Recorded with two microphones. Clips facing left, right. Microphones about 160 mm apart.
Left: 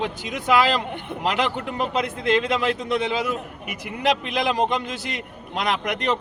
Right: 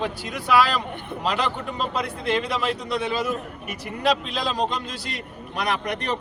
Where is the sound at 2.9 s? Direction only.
15° left (ahead or behind).